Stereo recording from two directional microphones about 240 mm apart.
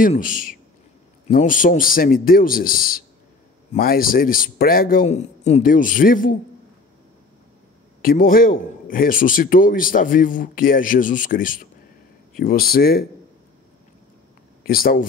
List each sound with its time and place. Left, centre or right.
0.0 s a man's voice: left
8.0 s a man's voice: left
14.6 s speech: left